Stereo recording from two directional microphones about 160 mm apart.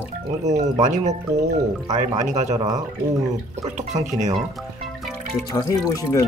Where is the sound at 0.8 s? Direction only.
50° right (ahead or behind).